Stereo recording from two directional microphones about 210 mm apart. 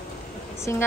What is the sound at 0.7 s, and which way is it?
Speech, 10° left (ahead or behind).